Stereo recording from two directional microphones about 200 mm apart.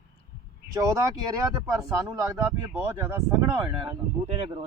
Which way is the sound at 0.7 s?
15° right (ahead or behind).